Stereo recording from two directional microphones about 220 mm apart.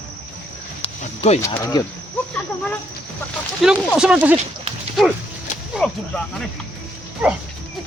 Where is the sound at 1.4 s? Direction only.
10° left (ahead or behind).